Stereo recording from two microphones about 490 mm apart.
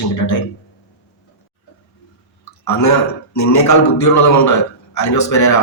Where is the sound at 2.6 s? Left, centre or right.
Left.